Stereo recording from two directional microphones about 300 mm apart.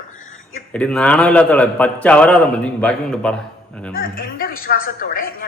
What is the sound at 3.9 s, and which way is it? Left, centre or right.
Speech, left.